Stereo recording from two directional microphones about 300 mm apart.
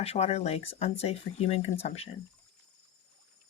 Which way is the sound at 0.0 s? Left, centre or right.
Left.